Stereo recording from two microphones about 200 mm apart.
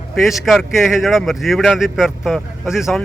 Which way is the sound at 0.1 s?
Centre (ahead or behind).